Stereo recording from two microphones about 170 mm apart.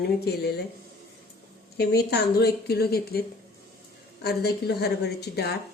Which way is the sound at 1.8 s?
70° left (ahead or behind).